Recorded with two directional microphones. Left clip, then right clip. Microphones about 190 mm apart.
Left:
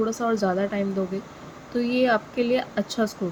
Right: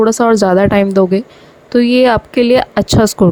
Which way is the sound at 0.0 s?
55° right (ahead or behind).